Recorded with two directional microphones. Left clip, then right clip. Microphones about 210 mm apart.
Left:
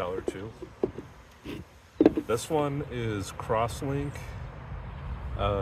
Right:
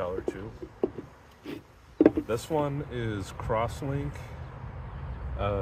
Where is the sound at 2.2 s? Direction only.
30° left (ahead or behind).